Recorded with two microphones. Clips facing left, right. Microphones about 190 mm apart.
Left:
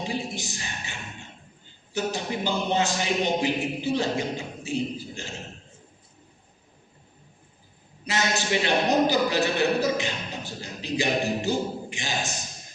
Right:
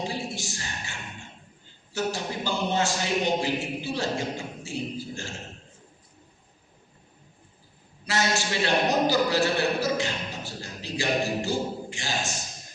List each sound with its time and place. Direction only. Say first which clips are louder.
0.0 s a sound: left 1 dB; 15° left (ahead or behind)
1.9 s speech: left 1 dB; 15° left (ahead or behind)
8.0 s a man's voice: even; 20° left (ahead or behind)